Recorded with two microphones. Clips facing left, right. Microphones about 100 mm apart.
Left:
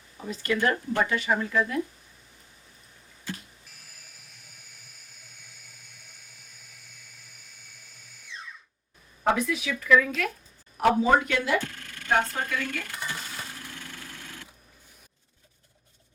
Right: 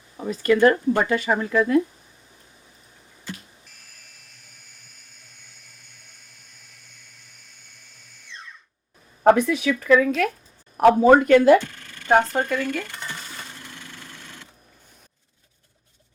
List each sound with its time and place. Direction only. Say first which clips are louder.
0.3 s speech: right 9 dB; 50° right (ahead or behind)
3.7 s a sound: right 1 dB; 5° left (ahead or behind)
9.2 s speech: right 9 dB; 45° right (ahead or behind)
10.8 s speech: right 7 dB; 50° right (ahead or behind)